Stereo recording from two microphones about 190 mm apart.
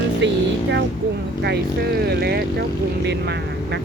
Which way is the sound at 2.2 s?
55° right (ahead or behind).